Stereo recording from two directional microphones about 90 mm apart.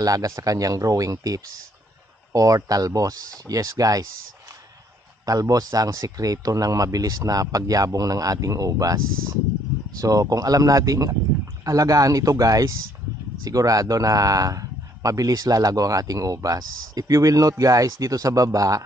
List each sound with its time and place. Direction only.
0.0 s a man's voice: 40° right (ahead or behind)
5.2 s a man's voice: 40° right (ahead or behind)